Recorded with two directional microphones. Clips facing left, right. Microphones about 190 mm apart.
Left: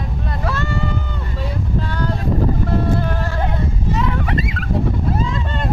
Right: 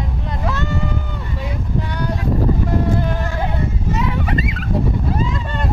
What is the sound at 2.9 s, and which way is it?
Mosquito, 15° right (ahead or behind).